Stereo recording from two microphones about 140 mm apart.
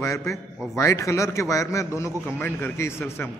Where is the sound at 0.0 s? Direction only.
20° left (ahead or behind).